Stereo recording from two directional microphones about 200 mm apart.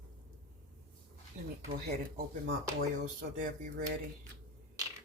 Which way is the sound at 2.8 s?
40° right (ahead or behind).